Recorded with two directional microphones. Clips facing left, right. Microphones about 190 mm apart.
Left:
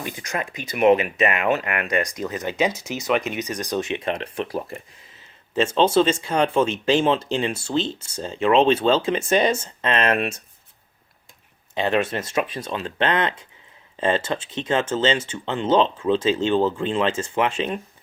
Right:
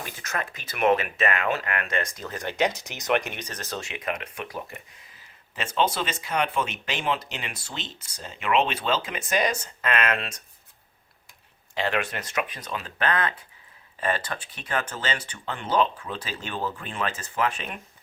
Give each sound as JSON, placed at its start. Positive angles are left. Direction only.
{"t": 0.2, "sound": "speech", "side_deg": 15}
{"t": 3.1, "sound": "speech", "side_deg": 5}
{"t": 11.7, "sound": "speech", "side_deg": 20}